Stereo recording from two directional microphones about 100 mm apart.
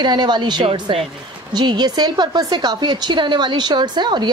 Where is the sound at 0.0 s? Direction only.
50° right (ahead or behind).